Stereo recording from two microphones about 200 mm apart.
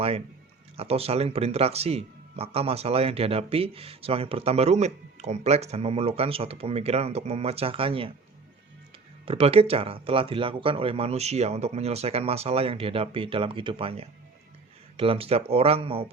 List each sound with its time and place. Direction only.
0.8 s speech: 30° right (ahead or behind)
9.2 s speech: 30° right (ahead or behind)